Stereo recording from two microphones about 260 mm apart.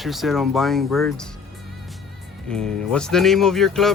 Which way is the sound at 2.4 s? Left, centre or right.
Centre.